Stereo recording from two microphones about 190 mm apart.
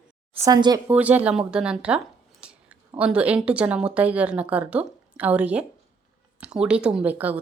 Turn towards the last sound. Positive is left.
turn(degrees=-10)  # may be behind; listen again after turning